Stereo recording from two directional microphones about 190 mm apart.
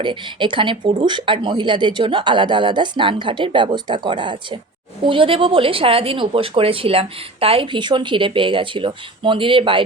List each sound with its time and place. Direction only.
0.0 s speech: 25° right (ahead or behind)